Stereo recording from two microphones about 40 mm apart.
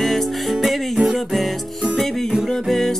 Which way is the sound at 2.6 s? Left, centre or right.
Centre.